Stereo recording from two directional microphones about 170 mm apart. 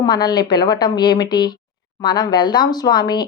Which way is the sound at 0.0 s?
25° left (ahead or behind).